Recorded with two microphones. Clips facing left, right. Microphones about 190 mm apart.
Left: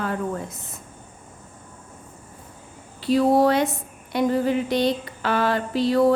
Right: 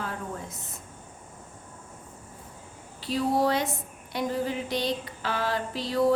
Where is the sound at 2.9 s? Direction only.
65° left (ahead or behind).